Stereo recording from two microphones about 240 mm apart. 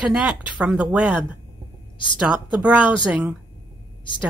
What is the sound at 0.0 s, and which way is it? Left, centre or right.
Speech, centre.